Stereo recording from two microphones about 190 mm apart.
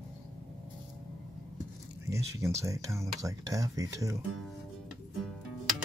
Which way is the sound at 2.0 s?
15° right (ahead or behind).